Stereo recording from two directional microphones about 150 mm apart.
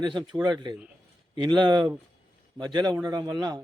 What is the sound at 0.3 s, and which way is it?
A man's voice, 25° right (ahead or behind).